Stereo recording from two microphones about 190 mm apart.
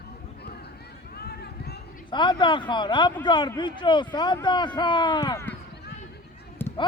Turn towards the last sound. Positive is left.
turn(degrees=10)  # may be behind; listen again after turning